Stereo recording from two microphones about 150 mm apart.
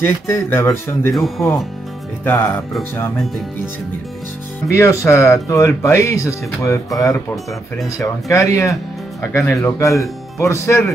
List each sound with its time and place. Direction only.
0.0 s speech: 15° left (ahead or behind)
2.2 s speech: 15° left (ahead or behind)
4.6 s speech: 15° left (ahead or behind)